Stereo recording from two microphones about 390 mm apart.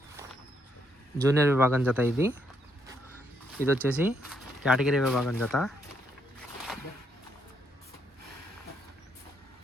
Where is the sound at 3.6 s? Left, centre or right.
Centre.